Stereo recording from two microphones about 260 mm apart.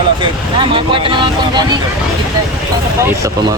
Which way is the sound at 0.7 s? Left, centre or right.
Centre.